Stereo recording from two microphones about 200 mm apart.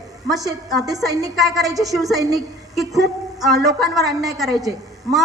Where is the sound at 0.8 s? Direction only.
15° right (ahead or behind).